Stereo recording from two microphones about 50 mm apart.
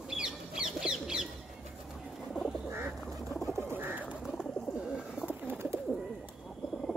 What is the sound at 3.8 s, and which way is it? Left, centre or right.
Pigeon, right.